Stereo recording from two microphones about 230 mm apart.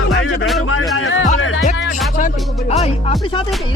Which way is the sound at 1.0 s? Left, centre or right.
Left.